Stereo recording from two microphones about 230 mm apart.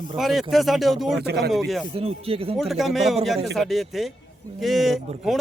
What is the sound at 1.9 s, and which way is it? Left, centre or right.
Music, right.